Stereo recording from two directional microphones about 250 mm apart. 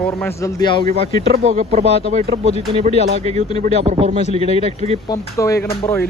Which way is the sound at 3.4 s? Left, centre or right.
Left.